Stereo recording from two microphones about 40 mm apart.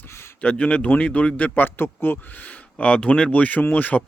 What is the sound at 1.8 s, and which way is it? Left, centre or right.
Speech, left.